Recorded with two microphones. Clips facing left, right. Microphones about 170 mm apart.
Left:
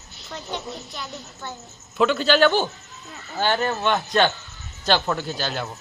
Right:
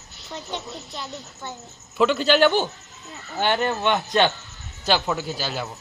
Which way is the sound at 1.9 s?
10° right (ahead or behind).